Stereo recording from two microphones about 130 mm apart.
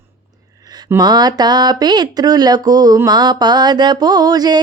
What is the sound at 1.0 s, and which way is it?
Speech, 30° right (ahead or behind).